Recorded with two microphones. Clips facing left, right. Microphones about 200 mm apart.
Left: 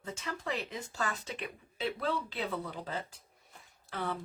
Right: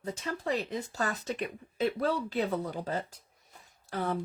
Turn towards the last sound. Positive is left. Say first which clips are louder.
# right 5 dB
turn(degrees=-40)  # may be behind; listen again after turning